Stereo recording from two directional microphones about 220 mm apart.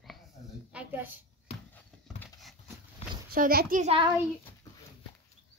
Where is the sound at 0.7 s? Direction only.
10° right (ahead or behind).